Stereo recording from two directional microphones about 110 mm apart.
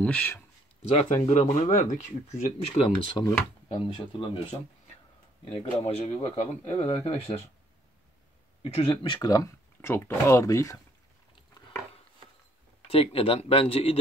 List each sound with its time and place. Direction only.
0.0 s speech: 10° left (ahead or behind)
0.8 s speech: 80° left
2.8 s speech: 50° left (ahead or behind)
3.2 s speech: 30° left (ahead or behind)
3.7 s speech: 50° left (ahead or behind)
5.5 s speech: 60° left (ahead or behind)
8.6 s speech: 60° left (ahead or behind)
9.3 s speech: 30° left (ahead or behind)
9.8 s speech: 20° left (ahead or behind)
12.9 s speech: 60° left (ahead or behind)